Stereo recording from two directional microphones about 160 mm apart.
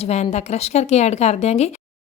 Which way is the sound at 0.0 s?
40° left (ahead or behind).